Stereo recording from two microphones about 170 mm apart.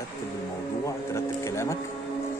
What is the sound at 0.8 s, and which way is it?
Speech, 15° left (ahead or behind).